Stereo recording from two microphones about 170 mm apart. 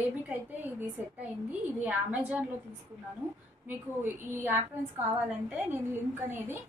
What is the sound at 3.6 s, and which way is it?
A woman's voice, 10° right (ahead or behind).